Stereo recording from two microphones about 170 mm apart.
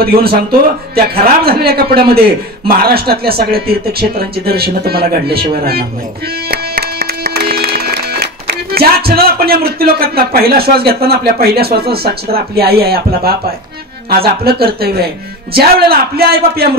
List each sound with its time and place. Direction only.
0.2 s a man's voice: 65° right (ahead or behind)
6.5 s music: 65° right (ahead or behind)
14.0 s a man's voice: 65° right (ahead or behind)